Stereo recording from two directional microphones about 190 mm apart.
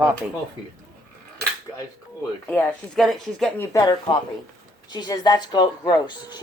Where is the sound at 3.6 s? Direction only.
15° left (ahead or behind).